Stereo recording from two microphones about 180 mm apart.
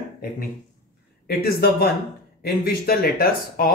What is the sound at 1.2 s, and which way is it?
Speech, 60° left (ahead or behind).